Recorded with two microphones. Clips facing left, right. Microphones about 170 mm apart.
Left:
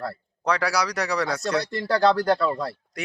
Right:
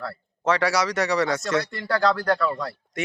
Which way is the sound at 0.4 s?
Centre (ahead or behind).